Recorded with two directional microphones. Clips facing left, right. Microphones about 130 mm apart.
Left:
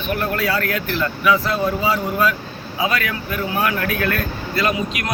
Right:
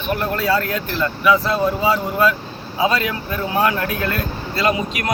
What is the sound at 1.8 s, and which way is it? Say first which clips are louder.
Speech: right 2 dB; 25° right (ahead or behind).